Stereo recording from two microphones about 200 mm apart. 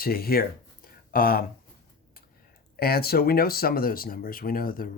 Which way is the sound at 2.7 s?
50° left (ahead or behind).